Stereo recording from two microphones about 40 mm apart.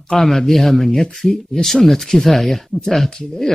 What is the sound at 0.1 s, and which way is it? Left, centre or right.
Speech, centre.